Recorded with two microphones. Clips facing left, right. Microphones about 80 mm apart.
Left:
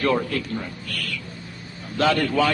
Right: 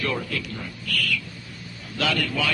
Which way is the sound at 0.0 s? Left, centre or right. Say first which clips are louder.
Left 6 dB; left.